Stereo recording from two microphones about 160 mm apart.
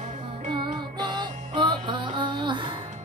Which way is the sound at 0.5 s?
30° right (ahead or behind).